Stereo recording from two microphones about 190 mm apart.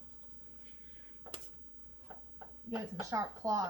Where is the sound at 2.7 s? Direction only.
20° right (ahead or behind).